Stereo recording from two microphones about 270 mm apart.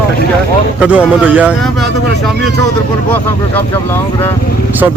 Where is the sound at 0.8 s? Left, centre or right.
Centre.